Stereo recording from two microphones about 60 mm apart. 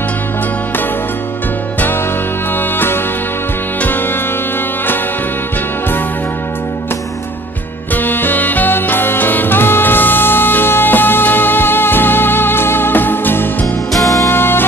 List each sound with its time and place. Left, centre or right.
7.9 s music: left